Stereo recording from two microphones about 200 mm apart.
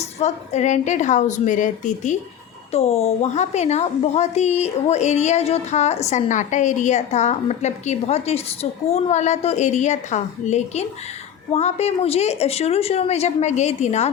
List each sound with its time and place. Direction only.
0.0 s a woman's voice: 35° left (ahead or behind)